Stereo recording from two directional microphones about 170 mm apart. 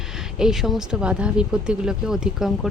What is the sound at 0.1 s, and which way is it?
Speech, 5° right (ahead or behind).